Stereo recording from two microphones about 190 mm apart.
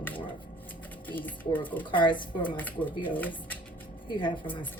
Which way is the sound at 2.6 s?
10° left (ahead or behind).